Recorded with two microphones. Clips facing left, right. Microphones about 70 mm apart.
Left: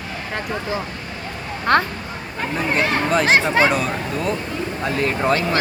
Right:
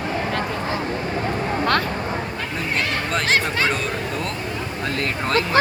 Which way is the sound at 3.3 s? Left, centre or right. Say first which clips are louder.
Left 5 dB; left.